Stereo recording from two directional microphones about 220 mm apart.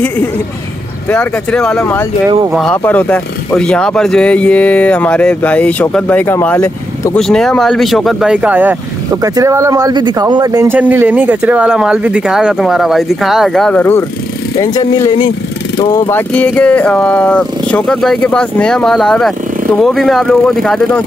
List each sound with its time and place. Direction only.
1.0 s speech: 5° left (ahead or behind)